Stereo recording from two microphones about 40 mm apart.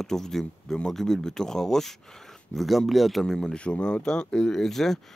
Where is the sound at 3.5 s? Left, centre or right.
Left; by 5.0 s centre.